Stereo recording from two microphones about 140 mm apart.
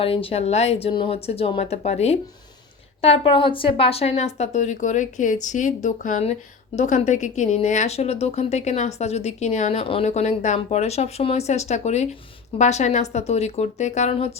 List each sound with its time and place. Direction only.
0.0 s a woman's voice: 40° left (ahead or behind)